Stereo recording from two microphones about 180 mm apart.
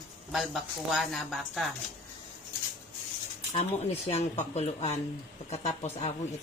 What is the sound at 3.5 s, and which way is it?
A woman's voice, 35° left (ahead or behind).